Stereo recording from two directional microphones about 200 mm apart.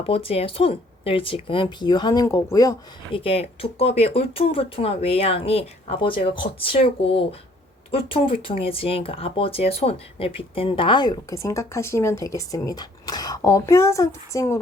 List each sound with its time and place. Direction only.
0.0 s speech: 30° left (ahead or behind)